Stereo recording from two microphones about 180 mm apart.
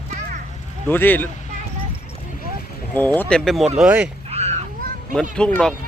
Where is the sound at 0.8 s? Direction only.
10° left (ahead or behind).